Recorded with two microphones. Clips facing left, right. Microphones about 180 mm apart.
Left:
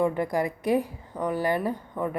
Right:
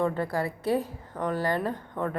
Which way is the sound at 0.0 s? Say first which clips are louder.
Left 3 dB; 15° left (ahead or behind).